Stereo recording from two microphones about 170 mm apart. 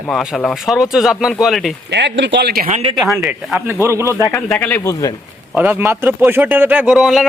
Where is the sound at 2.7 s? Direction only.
40° right (ahead or behind).